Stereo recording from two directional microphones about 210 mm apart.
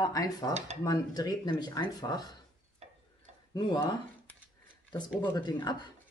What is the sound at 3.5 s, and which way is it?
Speech, 20° left (ahead or behind).